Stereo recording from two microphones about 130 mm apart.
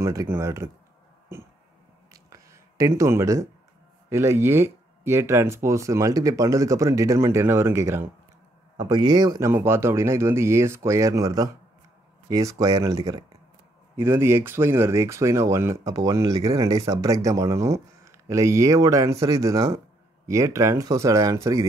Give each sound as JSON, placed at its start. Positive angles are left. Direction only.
{"t": 0.0, "sound": "speech", "side_deg": -20}
{"t": 2.1, "sound": "a sound", "side_deg": -25}
{"t": 4.1, "sound": "speech", "side_deg": -20}
{"t": 8.7, "sound": "speech", "side_deg": -35}
{"t": 9.5, "sound": "speech", "side_deg": -20}